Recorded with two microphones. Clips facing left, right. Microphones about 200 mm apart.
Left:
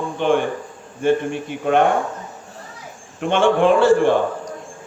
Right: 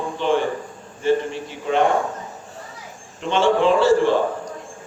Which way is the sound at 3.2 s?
55° left (ahead or behind).